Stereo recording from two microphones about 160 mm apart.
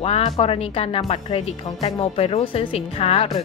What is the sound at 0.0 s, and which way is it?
A woman's voice, 40° left (ahead or behind).